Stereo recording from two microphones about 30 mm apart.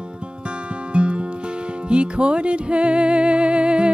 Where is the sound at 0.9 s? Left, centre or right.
Right.